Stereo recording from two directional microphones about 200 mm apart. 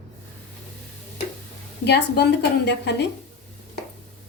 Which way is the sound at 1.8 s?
55° left (ahead or behind).